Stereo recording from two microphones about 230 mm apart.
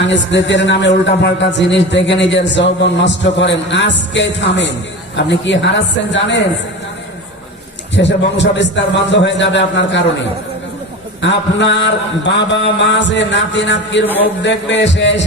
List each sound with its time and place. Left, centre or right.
0.0 s a man's voice: left
7.9 s a man's voice: left
11.2 s a man's voice: left